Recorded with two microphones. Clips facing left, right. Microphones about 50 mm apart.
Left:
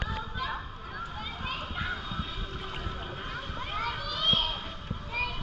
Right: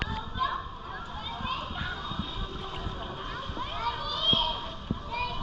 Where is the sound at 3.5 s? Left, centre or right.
Left.